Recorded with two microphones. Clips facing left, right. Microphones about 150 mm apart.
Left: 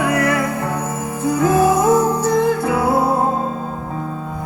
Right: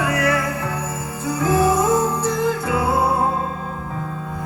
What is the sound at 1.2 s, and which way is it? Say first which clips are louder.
Music: left 5 dB; 50° left (ahead or behind).